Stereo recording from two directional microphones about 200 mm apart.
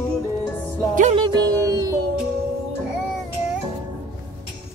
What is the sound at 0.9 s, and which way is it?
Music, 40° right (ahead or behind).